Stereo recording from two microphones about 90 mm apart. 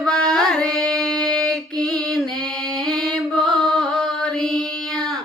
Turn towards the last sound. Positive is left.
turn(degrees=5)  # may be behind; listen again after turning